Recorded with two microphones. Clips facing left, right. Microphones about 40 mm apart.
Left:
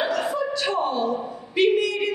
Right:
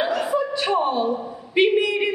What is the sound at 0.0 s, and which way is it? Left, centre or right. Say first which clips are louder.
Chuckle: right 2 dB; centre.